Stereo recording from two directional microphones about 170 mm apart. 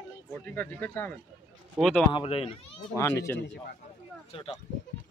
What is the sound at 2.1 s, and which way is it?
Speech, 35° left (ahead or behind).